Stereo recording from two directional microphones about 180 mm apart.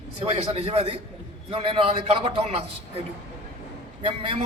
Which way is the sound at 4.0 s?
30° right (ahead or behind).